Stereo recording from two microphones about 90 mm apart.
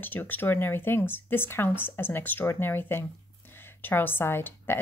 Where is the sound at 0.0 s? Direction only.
20° left (ahead or behind).